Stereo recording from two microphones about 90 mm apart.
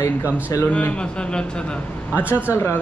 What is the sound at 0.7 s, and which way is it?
Speech, 15° left (ahead or behind).